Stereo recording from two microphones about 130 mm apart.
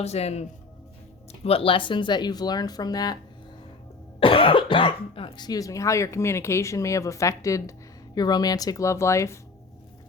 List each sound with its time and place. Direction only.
0.0 s speech: 55° left (ahead or behind); by 3.2 s 30° left (ahead or behind)
4.2 s speech: 40° left (ahead or behind); by 9.4 s 20° left (ahead or behind)